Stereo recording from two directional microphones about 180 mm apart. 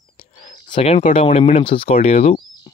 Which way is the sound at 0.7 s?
30° left (ahead or behind).